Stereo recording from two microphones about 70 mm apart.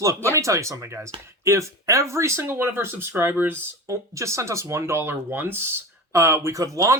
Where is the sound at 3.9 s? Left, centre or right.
Right.